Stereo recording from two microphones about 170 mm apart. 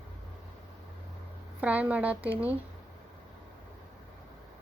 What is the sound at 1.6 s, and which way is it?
Speech, 10° right (ahead or behind).